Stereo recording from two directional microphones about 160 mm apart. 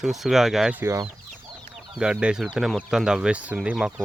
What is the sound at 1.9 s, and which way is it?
Speech, 5° right (ahead or behind).